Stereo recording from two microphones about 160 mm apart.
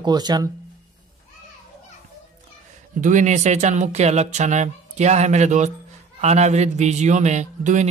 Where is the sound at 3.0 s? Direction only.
50° right (ahead or behind).